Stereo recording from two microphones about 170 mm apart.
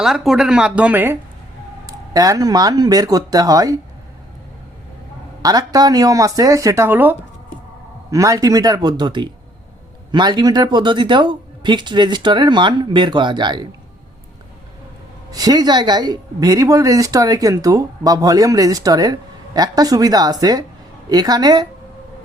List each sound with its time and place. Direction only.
0.0 s speech: 5° right (ahead or behind); by 3.8 s 20° right (ahead or behind)
5.4 s speech: 20° right (ahead or behind)
15.3 s speech: 20° right (ahead or behind)